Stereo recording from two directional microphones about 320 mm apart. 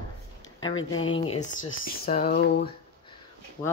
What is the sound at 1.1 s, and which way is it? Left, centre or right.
Speech, centre.